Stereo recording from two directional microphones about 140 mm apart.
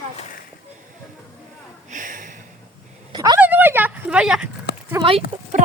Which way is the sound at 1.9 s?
70° right (ahead or behind).